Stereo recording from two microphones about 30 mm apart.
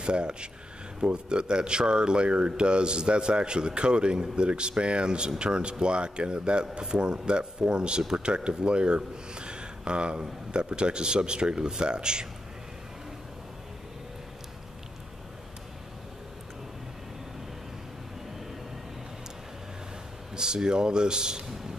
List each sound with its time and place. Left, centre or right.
0.0 s speech: right
20.3 s speech: right